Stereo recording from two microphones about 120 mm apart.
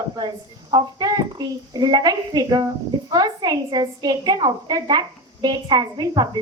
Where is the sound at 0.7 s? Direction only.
35° right (ahead or behind).